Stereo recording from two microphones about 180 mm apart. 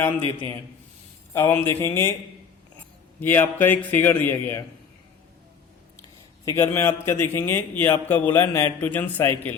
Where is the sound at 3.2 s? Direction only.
10° left (ahead or behind).